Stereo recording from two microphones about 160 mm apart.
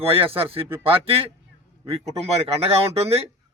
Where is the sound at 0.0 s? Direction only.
35° right (ahead or behind).